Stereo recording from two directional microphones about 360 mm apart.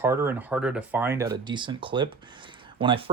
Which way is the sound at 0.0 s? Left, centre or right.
Centre.